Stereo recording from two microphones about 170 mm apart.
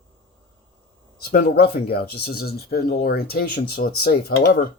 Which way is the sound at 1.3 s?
70° left (ahead or behind).